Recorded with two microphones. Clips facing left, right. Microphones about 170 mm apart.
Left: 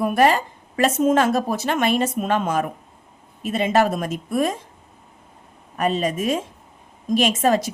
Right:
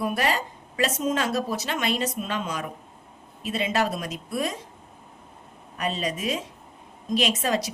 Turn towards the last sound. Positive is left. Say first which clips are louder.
# left 6 dB
turn(degrees=50)  # may be behind; listen again after turning